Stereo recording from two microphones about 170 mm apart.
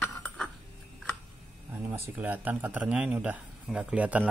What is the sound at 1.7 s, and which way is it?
Speech, 15° right (ahead or behind).